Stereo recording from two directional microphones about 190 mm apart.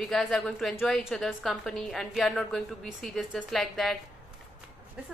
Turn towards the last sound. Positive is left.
turn(degrees=0)  # may be behind; listen again after turning